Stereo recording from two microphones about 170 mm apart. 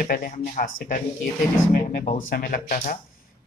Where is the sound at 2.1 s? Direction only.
60° left (ahead or behind).